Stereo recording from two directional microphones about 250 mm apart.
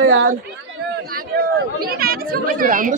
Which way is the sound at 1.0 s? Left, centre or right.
Right.